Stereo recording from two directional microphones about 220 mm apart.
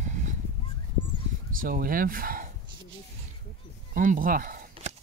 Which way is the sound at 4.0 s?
40° right (ahead or behind).